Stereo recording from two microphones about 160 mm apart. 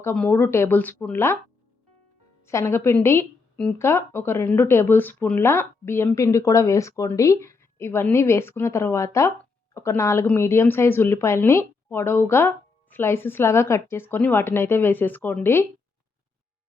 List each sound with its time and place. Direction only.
0.0 s speech: 15° left (ahead or behind)
2.5 s speech: 20° left (ahead or behind)